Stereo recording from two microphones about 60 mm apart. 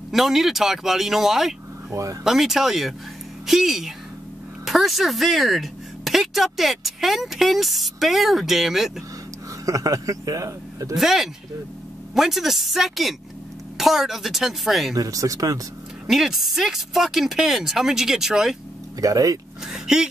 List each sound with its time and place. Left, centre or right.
0.1 s a woman's voice: centre
9.7 s a man's voice: right
11.0 s a woman's voice: centre
15.0 s a man's voice: right
16.1 s a woman's voice: centre
18.9 s speech: right
19.7 s speech: centre